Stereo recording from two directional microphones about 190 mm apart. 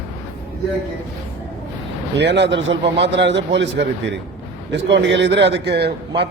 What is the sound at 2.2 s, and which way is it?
A man's voice, 65° right (ahead or behind).